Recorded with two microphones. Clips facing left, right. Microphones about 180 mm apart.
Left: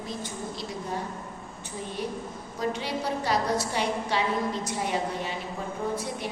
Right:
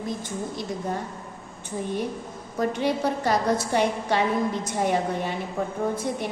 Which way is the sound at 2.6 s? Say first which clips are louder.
Right 6 dB; 55° right (ahead or behind).